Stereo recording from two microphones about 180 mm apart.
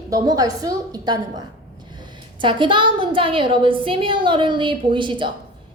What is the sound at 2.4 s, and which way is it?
A woman's voice, 25° right (ahead or behind).